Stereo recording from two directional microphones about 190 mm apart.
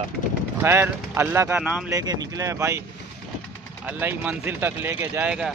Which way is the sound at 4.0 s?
10° right (ahead or behind).